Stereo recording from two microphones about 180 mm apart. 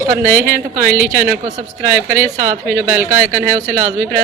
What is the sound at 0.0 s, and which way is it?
Speech, 15° right (ahead or behind).